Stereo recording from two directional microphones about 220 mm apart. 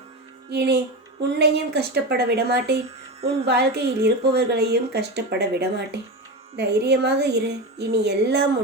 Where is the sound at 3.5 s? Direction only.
45° right (ahead or behind).